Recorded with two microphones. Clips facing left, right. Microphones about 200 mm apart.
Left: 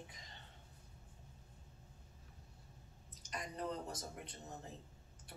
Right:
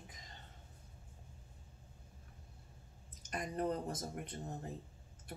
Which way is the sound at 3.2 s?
50° right (ahead or behind).